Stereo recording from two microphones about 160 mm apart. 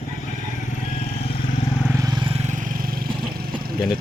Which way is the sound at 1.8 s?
20° right (ahead or behind).